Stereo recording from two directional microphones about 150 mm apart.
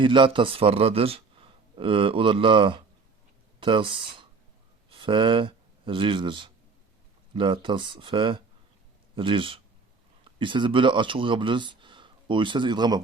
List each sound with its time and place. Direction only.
0.0 s a man's voice: 35° right (ahead or behind)